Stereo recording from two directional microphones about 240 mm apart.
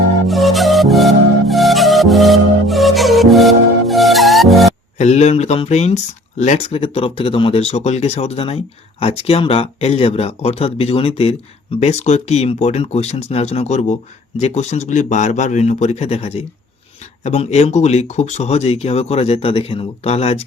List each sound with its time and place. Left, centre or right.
0.3 s music: centre
4.9 s speech: left